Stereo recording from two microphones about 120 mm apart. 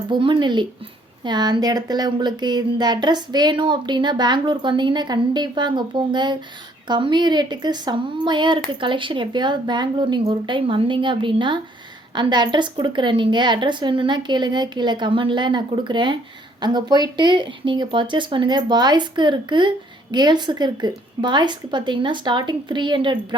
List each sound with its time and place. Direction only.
0.1 s speech: 40° right (ahead or behind)